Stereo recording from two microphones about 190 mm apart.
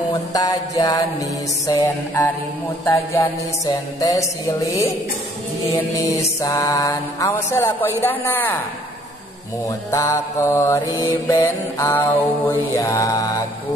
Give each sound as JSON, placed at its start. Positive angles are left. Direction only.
{"t": 0.1, "sound": "mantra", "side_deg": 20}
{"t": 6.0, "sound": "mantra", "side_deg": 15}
{"t": 9.7, "sound": "mantra", "side_deg": 15}